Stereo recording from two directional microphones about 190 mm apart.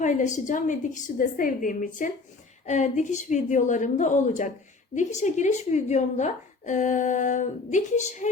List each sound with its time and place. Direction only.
0.0 s a woman's voice: 40° left (ahead or behind)